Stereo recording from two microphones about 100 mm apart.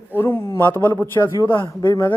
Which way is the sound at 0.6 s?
25° left (ahead or behind).